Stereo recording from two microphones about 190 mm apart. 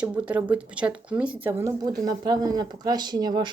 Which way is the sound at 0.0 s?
5° right (ahead or behind).